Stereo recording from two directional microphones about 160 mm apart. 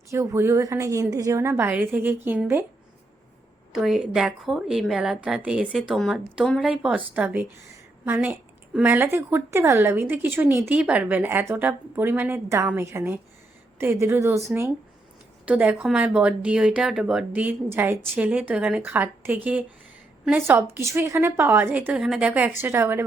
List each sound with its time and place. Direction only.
0.1 s a woman's voice: 20° right (ahead or behind)
3.7 s a woman's voice: centre (ahead or behind)
15.4 s a woman's voice: 10° right (ahead or behind)